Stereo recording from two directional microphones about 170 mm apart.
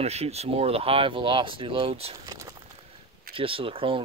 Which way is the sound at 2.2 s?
20° right (ahead or behind).